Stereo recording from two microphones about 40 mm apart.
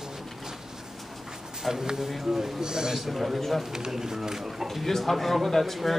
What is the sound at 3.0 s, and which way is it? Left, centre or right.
Speech, centre.